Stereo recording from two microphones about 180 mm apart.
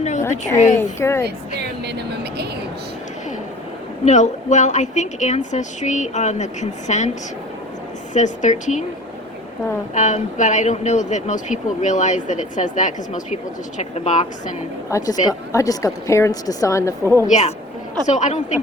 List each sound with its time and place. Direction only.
0.2 s a woman's voice: 15° left (ahead or behind)
1.8 s speech: 65° right (ahead or behind)
4.0 s a woman's voice: 40° left (ahead or behind)
8.1 s speech: 40° left (ahead or behind)
9.9 s a woman's voice: 40° left (ahead or behind)
14.8 s a woman's voice: 15° left (ahead or behind)
17.2 s a woman's voice: 35° left (ahead or behind)